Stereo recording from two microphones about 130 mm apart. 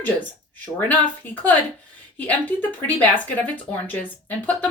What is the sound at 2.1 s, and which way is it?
Speech, 15° left (ahead or behind).